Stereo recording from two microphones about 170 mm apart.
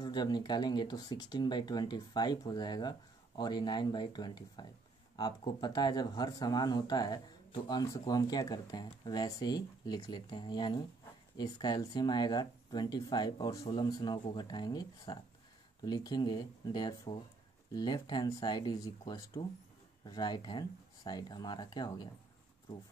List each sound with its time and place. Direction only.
0.0 s speech: 25° left (ahead or behind)